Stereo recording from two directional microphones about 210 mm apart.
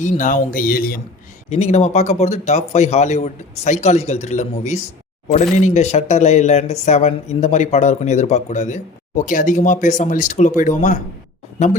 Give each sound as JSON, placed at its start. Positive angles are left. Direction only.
{"t": 0.0, "sound": "speech", "side_deg": 35}
{"t": 1.5, "sound": "speech", "side_deg": 35}